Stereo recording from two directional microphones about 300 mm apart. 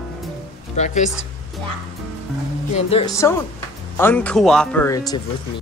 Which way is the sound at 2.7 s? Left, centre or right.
Centre.